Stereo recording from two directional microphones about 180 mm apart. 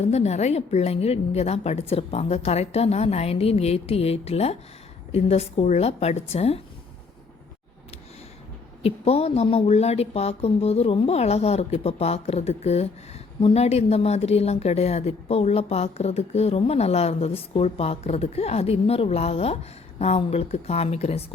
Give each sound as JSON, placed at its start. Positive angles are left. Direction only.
{"t": 0.0, "sound": "a woman's voice", "side_deg": 35}
{"t": 8.8, "sound": "a woman's voice", "side_deg": 35}